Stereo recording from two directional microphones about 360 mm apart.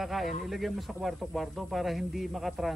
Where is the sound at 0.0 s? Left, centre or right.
Centre.